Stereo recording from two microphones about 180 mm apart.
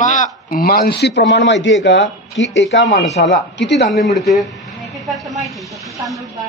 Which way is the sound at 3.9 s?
Centre (ahead or behind).